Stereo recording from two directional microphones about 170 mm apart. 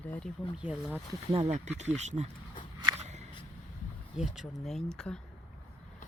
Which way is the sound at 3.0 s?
40° right (ahead or behind).